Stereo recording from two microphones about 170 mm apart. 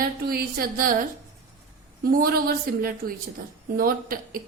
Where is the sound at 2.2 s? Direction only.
60° right (ahead or behind).